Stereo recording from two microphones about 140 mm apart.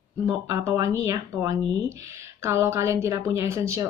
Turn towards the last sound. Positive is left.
turn(degrees=-20)  # may be behind; listen again after turning